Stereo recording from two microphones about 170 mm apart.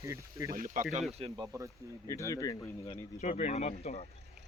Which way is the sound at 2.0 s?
20° left (ahead or behind).